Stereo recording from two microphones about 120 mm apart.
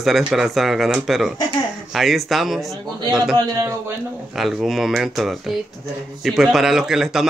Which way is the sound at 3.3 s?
25° right (ahead or behind).